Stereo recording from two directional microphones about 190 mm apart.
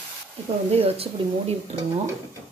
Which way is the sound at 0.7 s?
30° right (ahead or behind).